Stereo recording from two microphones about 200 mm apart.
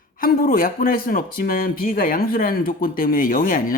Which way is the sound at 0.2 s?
45° left (ahead or behind).